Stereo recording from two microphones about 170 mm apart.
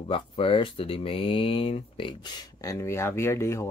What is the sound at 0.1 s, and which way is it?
Speech, 30° left (ahead or behind).